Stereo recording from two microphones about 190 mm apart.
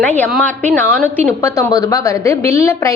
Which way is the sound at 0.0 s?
10° left (ahead or behind).